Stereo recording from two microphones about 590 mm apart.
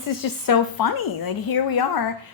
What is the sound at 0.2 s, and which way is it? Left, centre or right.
A woman's voice, left.